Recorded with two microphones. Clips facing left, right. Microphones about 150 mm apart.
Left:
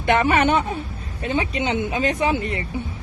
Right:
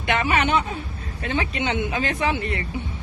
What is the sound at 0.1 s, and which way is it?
Speech, 50° left (ahead or behind).